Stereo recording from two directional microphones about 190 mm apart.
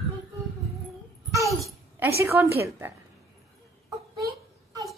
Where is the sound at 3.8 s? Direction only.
20° right (ahead or behind).